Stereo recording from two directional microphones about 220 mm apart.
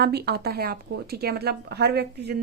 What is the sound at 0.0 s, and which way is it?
Speech, 45° right (ahead or behind).